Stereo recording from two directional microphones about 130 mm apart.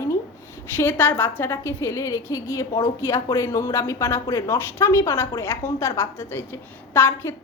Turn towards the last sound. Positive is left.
turn(degrees=20)  # may be behind; listen again after turning